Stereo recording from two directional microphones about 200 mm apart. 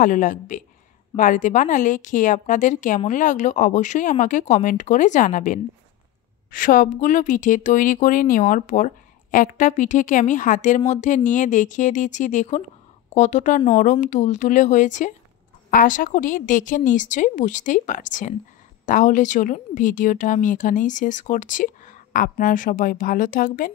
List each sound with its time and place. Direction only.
0.0 s a woman's voice: 40° left (ahead or behind)